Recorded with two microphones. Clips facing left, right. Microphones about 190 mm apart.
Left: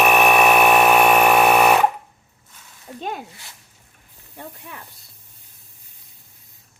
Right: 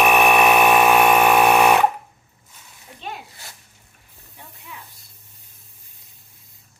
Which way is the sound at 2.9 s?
40° left (ahead or behind).